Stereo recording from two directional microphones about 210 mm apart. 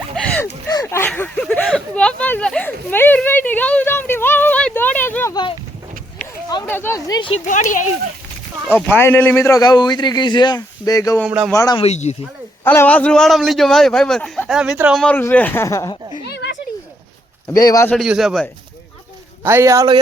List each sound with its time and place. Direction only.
0.7 s a sound: 15° left (ahead or behind)
6.7 s a man's voice: 10° left (ahead or behind)
7.4 s speech: 35° left (ahead or behind)
8.6 s a man's voice: 10° left (ahead or behind)
11.3 s a man's voice: 5° right (ahead or behind)
11.5 s a man's voice: 15° left (ahead or behind)
11.8 s speech: 30° left (ahead or behind)
12.6 s a man's voice: 10° left (ahead or behind)
15.0 s a man's voice: 10° left (ahead or behind)
16.2 s a sound: 55° left (ahead or behind)
17.5 s a man's voice: 15° left (ahead or behind)
17.9 s a man's voice: centre (ahead or behind)
19.5 s speech: 15° right (ahead or behind)